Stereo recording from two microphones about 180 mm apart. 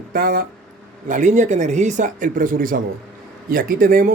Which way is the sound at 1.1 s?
45° right (ahead or behind).